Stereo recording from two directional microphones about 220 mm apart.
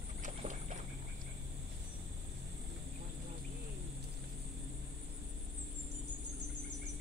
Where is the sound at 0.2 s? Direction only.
30° right (ahead or behind).